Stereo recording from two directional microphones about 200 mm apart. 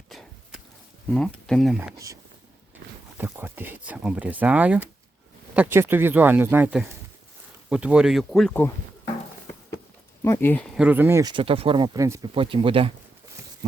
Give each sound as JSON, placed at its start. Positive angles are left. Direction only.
{"t": 0.1, "sound": "a sound", "side_deg": 0}
{"t": 1.1, "sound": "speech", "side_deg": 5}
{"t": 3.2, "sound": "speech", "side_deg": -10}
{"t": 10.2, "sound": "speech", "side_deg": 10}
{"t": 10.8, "sound": "speech", "side_deg": -10}